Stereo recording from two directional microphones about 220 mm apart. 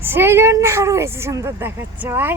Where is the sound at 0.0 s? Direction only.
10° right (ahead or behind).